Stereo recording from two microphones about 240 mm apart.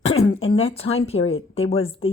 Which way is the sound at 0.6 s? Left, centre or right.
Left.